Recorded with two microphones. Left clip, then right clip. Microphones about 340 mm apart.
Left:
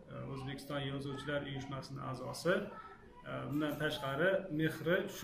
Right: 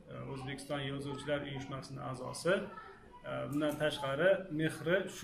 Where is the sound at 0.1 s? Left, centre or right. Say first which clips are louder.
Right 2 dB; centre.